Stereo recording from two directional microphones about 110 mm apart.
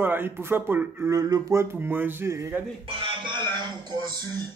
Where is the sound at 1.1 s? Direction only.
30° right (ahead or behind).